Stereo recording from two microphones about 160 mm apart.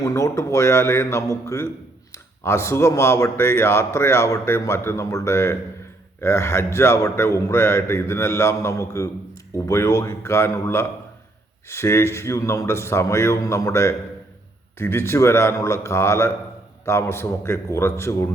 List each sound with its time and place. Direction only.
0.0 s speech: 20° left (ahead or behind)